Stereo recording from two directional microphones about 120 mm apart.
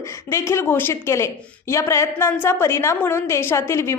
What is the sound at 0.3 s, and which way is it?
A woman's voice, 20° left (ahead or behind).